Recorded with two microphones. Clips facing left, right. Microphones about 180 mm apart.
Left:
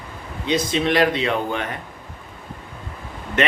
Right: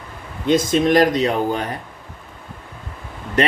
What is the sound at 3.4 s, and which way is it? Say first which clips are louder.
Speech: right 3 dB; 35° right (ahead or behind).